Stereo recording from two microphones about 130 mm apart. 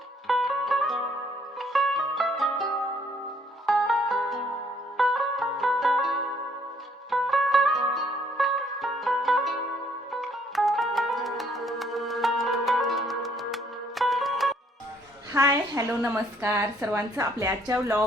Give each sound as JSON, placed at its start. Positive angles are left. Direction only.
{"t": 0.3, "sound": "music", "side_deg": 0}
{"t": 3.7, "sound": "music", "side_deg": 0}
{"t": 15.3, "sound": "a woman's voice", "side_deg": -25}